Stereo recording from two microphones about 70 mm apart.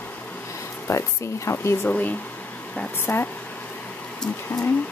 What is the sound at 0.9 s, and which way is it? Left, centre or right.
Speech, left.